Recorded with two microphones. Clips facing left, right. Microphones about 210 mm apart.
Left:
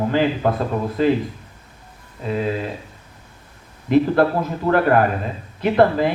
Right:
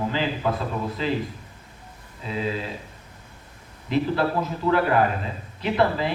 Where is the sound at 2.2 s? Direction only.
55° left (ahead or behind).